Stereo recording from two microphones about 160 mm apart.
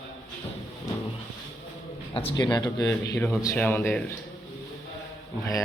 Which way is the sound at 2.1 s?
30° left (ahead or behind).